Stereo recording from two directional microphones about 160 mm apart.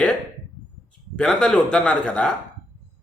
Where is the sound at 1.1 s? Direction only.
5° left (ahead or behind).